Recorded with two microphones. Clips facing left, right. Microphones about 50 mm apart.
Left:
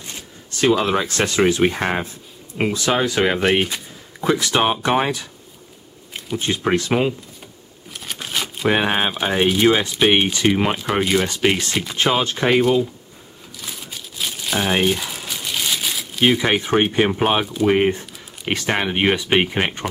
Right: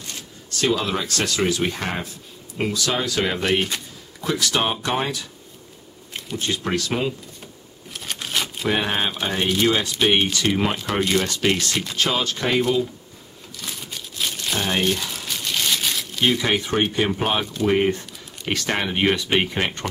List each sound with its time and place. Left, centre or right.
0.0 s speech: left
3.3 s speech: centre
4.2 s speech: left
6.1 s a sound: centre
6.4 s speech: left
7.9 s a sound: centre
8.6 s speech: left
13.6 s crumpling: centre
16.4 s speech: left